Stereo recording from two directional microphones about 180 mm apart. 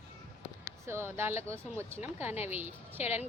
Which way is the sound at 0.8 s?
15° right (ahead or behind).